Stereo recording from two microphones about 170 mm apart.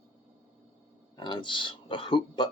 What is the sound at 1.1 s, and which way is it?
Speech, 30° left (ahead or behind).